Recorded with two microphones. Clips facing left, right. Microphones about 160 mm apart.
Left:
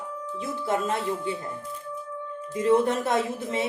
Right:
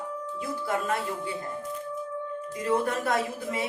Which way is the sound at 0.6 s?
25° left (ahead or behind).